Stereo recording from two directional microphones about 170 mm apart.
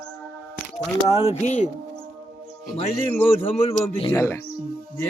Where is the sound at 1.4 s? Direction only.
45° left (ahead or behind).